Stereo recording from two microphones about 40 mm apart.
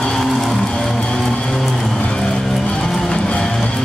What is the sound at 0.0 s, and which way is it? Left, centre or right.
Music, centre.